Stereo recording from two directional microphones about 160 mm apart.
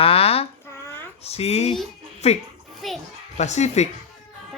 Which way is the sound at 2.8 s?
Centre (ahead or behind).